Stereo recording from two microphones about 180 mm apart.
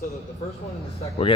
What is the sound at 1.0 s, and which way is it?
Speech, 30° left (ahead or behind).